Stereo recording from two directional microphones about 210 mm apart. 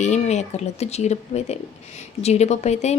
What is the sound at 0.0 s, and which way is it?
Speech, 35° left (ahead or behind).